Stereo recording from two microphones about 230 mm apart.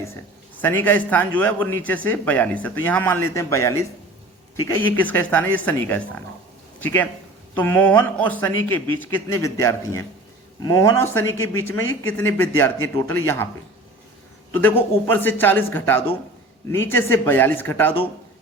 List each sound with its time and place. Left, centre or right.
0.5 s a man's voice: centre
14.5 s a man's voice: centre